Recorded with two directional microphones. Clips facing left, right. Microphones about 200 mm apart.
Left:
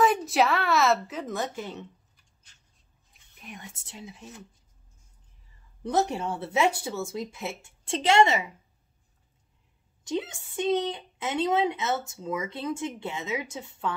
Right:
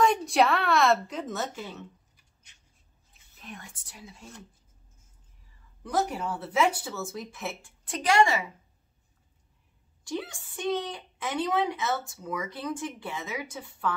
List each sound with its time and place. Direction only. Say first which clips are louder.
0.0 s speech: even; 5° left (ahead or behind)
3.1 s speech: right 1 dB; 15° left (ahead or behind)
5.9 s a woman's voice: left 3 dB; 25° left (ahead or behind)
10.0 s a woman's voice: left 3 dB; 20° left (ahead or behind)